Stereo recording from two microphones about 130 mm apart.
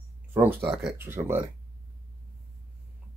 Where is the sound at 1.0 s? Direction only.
20° right (ahead or behind).